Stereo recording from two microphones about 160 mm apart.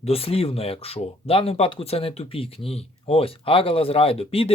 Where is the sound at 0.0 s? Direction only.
40° left (ahead or behind).